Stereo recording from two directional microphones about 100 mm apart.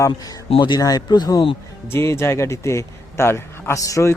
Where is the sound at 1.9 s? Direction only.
25° left (ahead or behind).